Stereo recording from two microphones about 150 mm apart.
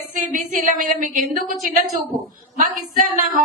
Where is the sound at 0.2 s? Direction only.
60° right (ahead or behind).